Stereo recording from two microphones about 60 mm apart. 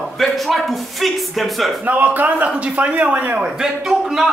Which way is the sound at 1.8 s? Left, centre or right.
Right.